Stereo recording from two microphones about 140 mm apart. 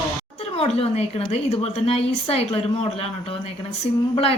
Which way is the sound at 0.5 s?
45° left (ahead or behind).